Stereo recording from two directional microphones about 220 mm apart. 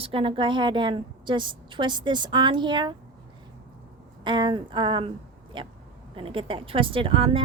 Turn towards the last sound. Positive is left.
turn(degrees=-25)  # may be behind; listen again after turning